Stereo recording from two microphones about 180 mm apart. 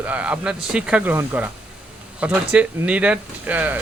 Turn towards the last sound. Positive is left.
turn(degrees=-10)  # may be behind; listen again after turning